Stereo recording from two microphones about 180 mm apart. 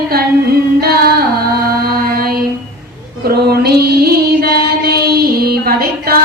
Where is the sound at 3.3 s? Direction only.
60° right (ahead or behind).